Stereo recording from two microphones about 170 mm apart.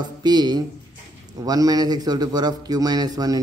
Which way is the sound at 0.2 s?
25° right (ahead or behind).